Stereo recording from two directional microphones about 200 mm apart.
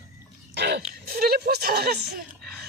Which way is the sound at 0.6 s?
60° right (ahead or behind).